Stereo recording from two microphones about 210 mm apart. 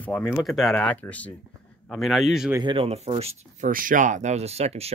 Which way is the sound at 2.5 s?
25° right (ahead or behind).